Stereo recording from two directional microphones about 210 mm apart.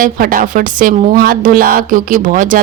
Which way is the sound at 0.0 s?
40° right (ahead or behind).